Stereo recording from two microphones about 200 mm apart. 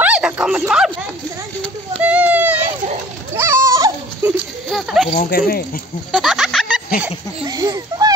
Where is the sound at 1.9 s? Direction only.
5° right (ahead or behind).